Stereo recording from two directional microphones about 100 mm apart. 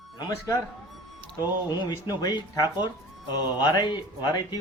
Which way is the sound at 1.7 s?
45° left (ahead or behind).